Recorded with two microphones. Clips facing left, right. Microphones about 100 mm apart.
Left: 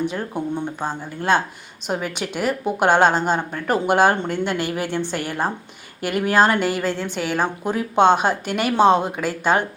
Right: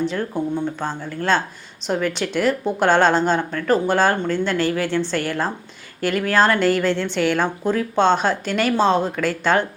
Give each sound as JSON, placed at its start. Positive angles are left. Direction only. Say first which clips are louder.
{"t": 0.0, "sound": "speech", "louder": "right 2 dB", "side_deg": 15}